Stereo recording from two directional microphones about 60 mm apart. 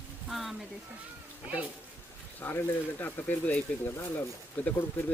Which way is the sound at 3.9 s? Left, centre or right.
Left.